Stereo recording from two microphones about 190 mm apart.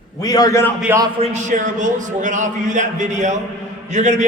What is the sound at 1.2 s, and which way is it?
A man's voice, 40° right (ahead or behind).